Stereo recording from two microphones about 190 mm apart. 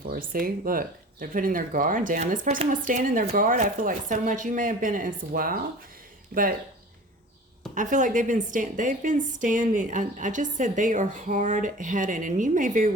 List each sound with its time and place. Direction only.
0.1 s speech: 50° right (ahead or behind)
7.8 s a woman's voice: 40° right (ahead or behind)